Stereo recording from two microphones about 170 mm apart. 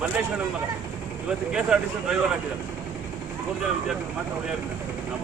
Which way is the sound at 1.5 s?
5° right (ahead or behind).